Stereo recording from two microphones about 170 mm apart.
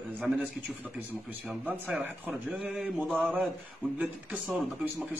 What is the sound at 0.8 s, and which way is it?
Speech, 10° right (ahead or behind).